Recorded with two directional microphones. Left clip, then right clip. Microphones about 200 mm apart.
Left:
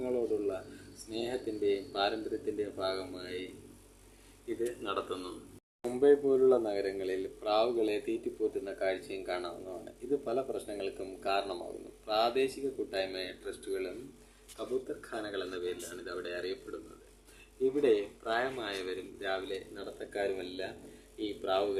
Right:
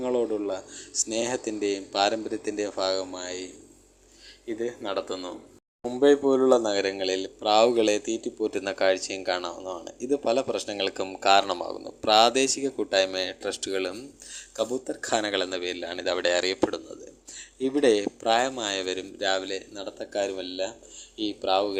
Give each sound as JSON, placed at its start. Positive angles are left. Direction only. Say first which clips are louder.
{"t": 0.0, "sound": "a man's voice", "louder": "right 6 dB", "side_deg": -30}
{"t": 15.0, "sound": "a man's voice", "louder": "right 12 dB", "side_deg": -45}